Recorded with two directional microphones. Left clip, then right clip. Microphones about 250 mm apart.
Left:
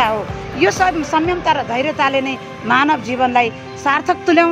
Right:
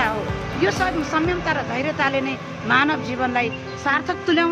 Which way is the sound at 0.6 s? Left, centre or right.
Left.